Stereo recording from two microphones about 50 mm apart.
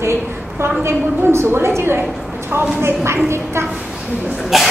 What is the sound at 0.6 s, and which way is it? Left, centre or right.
A woman's voice, right.